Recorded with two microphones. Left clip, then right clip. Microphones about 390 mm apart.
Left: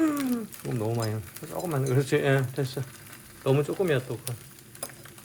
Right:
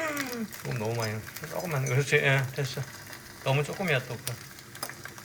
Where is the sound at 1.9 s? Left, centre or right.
Centre.